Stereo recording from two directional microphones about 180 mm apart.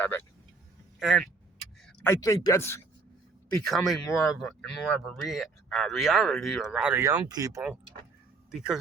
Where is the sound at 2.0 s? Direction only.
15° left (ahead or behind).